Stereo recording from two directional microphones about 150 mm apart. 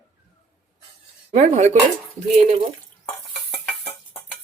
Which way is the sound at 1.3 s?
50° right (ahead or behind).